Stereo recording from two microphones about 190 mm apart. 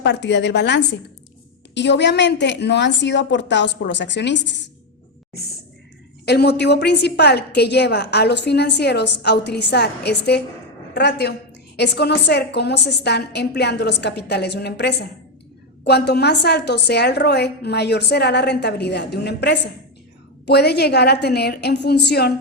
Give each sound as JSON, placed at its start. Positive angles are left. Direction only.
{"t": 0.0, "sound": "a woman's voice", "side_deg": 65}
{"t": 6.2, "sound": "a woman's voice", "side_deg": 60}